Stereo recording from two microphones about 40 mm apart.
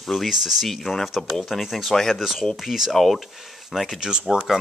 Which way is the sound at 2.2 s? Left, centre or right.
Centre.